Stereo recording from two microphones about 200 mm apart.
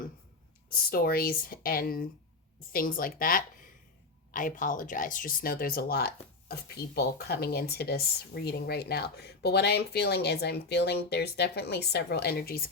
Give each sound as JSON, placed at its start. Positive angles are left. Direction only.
{"t": 0.9, "sound": "speech", "side_deg": 45}